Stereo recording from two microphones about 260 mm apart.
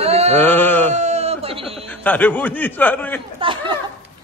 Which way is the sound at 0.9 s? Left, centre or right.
Right.